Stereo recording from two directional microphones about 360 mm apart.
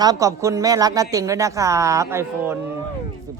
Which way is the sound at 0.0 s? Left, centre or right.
Centre.